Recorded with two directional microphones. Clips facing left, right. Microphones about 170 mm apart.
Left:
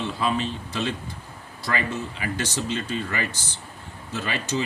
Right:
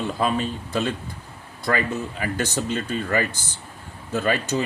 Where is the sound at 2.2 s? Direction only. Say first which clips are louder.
Right 3 dB; 50° right (ahead or behind).